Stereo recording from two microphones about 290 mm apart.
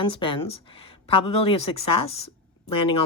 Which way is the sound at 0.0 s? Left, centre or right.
Centre.